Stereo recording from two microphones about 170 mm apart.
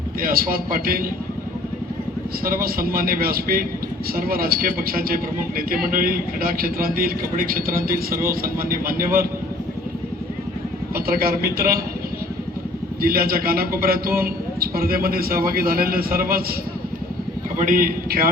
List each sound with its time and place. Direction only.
0.2 s a man's voice: 55° right (ahead or behind)
2.4 s a man's voice: 60° right (ahead or behind)
10.9 s a man's voice: 60° right (ahead or behind)
13.0 s a man's voice: 60° right (ahead or behind)
17.6 s a man's voice: 50° right (ahead or behind)